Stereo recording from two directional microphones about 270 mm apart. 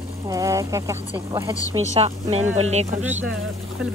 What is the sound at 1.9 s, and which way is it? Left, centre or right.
Speech, right.